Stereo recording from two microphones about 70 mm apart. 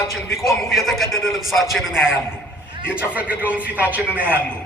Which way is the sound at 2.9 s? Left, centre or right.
Right.